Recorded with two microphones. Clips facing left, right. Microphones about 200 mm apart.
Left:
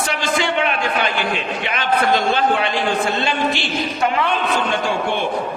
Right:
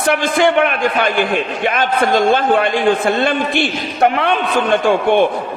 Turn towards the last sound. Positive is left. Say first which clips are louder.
# right 8 dB
turn(degrees=-55)  # may be behind; listen again after turning